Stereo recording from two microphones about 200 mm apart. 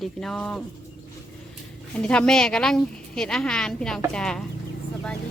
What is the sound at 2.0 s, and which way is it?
Speech, 5° left (ahead or behind).